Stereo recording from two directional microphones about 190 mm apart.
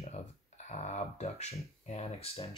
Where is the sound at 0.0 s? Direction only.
35° left (ahead or behind).